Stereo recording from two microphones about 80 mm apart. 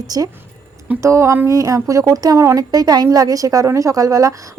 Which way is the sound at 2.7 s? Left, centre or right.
Right.